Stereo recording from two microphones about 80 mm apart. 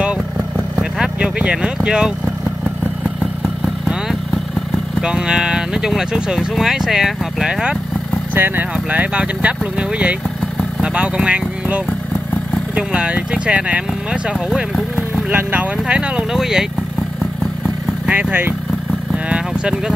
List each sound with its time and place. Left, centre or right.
0.9 s speech: centre
3.4 s vehicle: centre
5.0 s speech: centre
8.4 s speech: right; by 16.6 s centre
18.0 s speech: centre
19.1 s vehicle: centre